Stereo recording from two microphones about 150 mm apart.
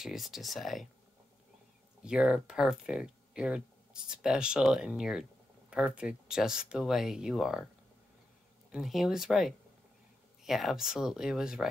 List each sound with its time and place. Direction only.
0.0 s speech: centre (ahead or behind)
2.0 s speech: 5° right (ahead or behind)
8.7 s speech: centre (ahead or behind)